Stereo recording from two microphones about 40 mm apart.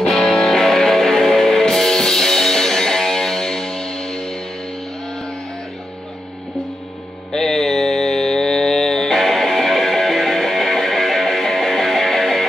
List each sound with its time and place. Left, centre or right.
0.1 s music: centre
7.3 s music: centre